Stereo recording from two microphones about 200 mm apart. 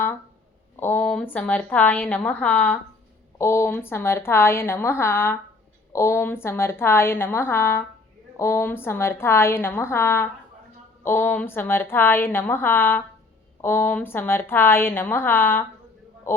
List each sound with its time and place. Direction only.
0.8 s a woman's voice: 10° left (ahead or behind)